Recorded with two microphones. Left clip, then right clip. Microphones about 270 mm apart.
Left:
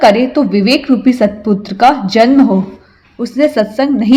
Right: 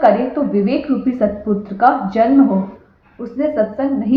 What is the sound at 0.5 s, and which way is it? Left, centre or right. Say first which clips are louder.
A woman's voice: left 6 dB; left.